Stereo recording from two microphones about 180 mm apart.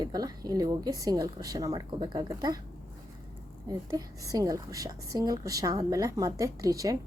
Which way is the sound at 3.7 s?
20° right (ahead or behind).